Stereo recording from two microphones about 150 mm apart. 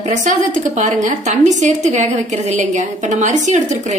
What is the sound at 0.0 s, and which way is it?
A woman's voice, 55° right (ahead or behind).